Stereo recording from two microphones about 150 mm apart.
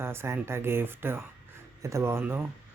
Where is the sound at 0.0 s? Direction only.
15° right (ahead or behind).